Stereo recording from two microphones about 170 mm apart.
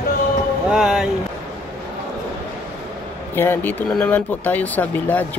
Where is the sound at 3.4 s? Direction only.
10° left (ahead or behind).